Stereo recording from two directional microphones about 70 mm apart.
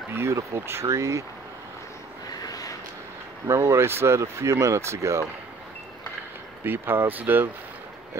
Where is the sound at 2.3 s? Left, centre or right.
Left.